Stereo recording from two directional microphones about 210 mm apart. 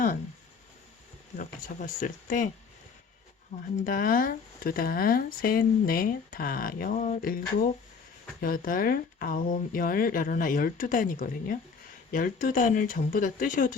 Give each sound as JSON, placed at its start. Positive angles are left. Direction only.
{"t": 1.4, "sound": "speech", "side_deg": 40}
{"t": 3.8, "sound": "speech", "side_deg": 40}